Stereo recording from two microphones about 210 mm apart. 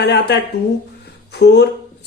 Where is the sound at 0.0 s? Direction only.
55° left (ahead or behind).